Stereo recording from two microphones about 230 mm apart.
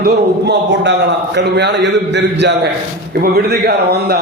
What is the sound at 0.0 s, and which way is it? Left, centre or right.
A man's voice, right.